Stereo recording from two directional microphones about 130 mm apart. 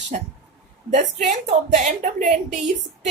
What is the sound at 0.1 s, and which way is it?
A woman's voice, 65° right (ahead or behind).